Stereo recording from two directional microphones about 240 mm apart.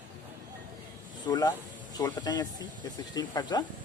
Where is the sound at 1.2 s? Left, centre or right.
Centre.